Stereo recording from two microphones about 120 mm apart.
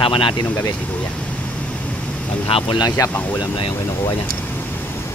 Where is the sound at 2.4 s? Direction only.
45° left (ahead or behind).